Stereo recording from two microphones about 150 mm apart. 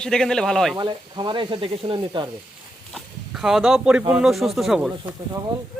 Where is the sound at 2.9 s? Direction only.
5° right (ahead or behind).